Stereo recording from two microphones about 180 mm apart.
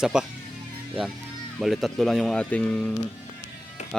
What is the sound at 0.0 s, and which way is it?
Speech, 5° right (ahead or behind).